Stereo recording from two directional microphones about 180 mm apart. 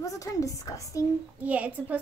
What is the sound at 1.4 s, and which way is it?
Speech, 10° right (ahead or behind).